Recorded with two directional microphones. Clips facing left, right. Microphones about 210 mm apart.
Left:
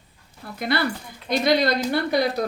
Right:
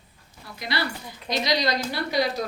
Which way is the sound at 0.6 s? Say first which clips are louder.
Left 6 dB; 55° left (ahead or behind).